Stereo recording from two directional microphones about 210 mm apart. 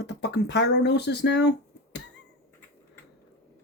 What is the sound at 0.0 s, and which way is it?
Speech, 55° left (ahead or behind).